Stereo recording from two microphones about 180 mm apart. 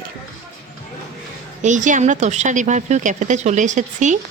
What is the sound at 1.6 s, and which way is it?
A woman's voice, 45° right (ahead or behind).